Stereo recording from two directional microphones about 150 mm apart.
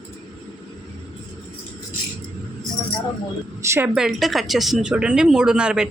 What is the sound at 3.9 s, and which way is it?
Speech, 5° right (ahead or behind).